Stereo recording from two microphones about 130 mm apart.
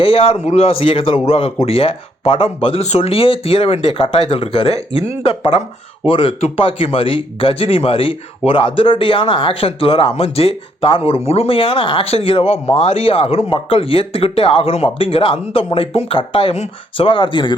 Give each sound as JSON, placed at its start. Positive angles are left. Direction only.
{"t": 0.0, "sound": "speech", "side_deg": 50}